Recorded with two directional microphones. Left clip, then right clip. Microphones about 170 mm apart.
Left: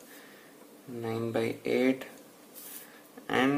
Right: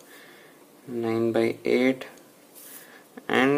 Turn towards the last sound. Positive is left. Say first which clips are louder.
# right 5 dB
turn(degrees=-30)  # may be behind; listen again after turning